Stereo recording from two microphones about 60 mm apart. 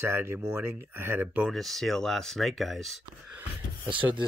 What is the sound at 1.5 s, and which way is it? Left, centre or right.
Speech, centre.